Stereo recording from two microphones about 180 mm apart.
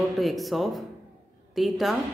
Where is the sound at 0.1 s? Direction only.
Centre (ahead or behind).